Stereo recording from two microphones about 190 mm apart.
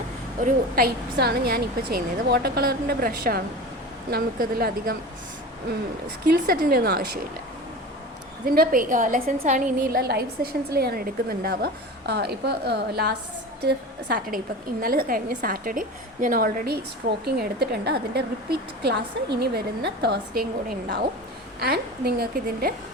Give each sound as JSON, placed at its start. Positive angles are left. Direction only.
{"t": 0.4, "sound": "a woman's voice", "side_deg": -55}
{"t": 6.3, "sound": "a woman's voice", "side_deg": -50}
{"t": 8.5, "sound": "a woman's voice", "side_deg": -50}